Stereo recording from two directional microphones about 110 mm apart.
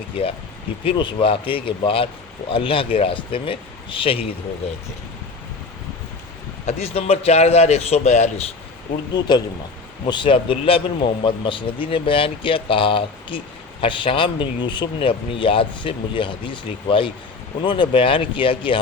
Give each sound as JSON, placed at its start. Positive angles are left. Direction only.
{"t": 0.9, "sound": "a man's voice", "side_deg": 50}
{"t": 6.7, "sound": "a man's voice", "side_deg": 70}
{"t": 9.1, "sound": "a man's voice", "side_deg": 40}